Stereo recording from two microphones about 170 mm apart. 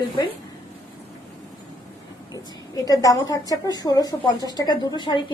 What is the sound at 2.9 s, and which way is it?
A woman's voice, 20° left (ahead or behind).